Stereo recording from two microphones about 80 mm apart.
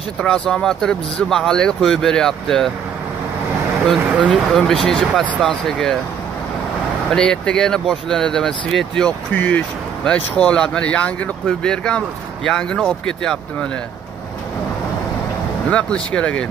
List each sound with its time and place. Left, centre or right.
0.2 s speech: centre
4.1 s speech: centre
4.6 s speech: centre
7.2 s speech: centre
15.7 s speech: centre